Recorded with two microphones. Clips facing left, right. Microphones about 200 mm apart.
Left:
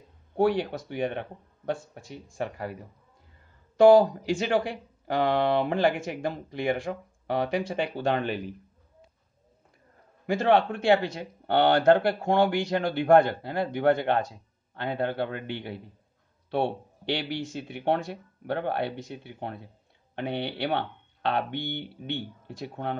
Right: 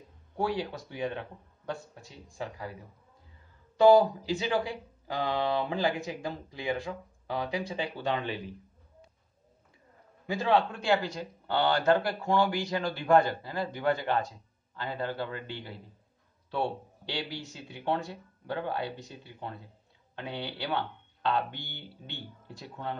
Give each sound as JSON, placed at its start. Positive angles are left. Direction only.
{"t": 0.4, "sound": "speech", "side_deg": 60}
{"t": 1.7, "sound": "speech", "side_deg": 85}
{"t": 3.7, "sound": "speech", "side_deg": 80}
{"t": 10.3, "sound": "speech", "side_deg": 60}